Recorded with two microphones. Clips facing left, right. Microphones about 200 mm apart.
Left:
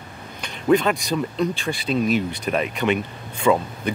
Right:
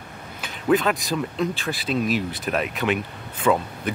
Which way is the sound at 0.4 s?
Centre (ahead or behind).